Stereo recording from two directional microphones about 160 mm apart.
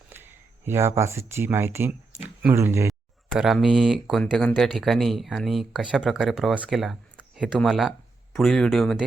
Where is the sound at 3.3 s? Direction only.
Centre (ahead or behind).